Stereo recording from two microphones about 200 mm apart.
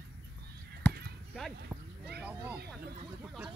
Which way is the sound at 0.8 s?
10° left (ahead or behind).